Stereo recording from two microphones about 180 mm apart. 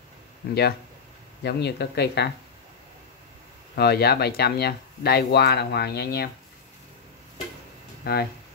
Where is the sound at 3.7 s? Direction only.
65° left (ahead or behind).